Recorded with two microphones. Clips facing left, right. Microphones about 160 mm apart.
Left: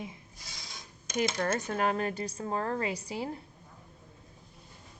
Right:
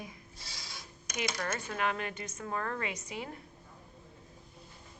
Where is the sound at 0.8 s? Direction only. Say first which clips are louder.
Left 9 dB; 30° left (ahead or behind).